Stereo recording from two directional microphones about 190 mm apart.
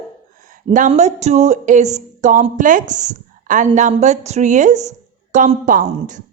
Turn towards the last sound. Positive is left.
turn(degrees=-40)  # may be behind; listen again after turning